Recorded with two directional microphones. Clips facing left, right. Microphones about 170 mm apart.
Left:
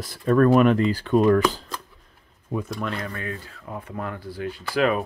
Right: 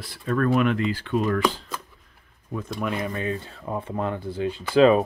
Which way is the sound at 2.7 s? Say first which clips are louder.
Right 2 dB; 15° right (ahead or behind).